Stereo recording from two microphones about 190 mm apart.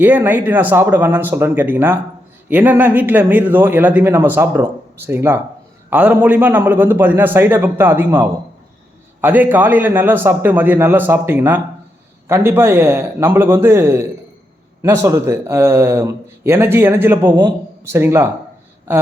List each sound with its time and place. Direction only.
0.0 s speech: 10° right (ahead or behind)